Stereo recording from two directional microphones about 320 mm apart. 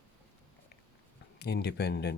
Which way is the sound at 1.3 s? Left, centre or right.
Left.